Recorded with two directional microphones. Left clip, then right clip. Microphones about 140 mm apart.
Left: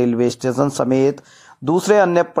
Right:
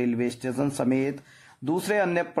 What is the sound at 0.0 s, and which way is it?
Speech, 35° left (ahead or behind).